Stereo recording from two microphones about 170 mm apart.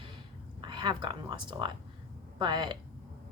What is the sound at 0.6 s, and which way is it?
A woman's voice, 30° right (ahead or behind).